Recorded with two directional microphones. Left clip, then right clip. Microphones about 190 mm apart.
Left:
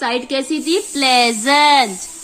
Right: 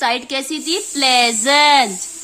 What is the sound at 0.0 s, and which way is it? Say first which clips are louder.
Speech: even; 15° right (ahead or behind).